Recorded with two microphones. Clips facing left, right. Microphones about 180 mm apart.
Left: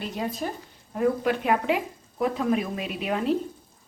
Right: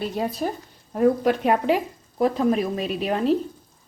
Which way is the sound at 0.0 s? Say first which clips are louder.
Right 4 dB; 35° right (ahead or behind).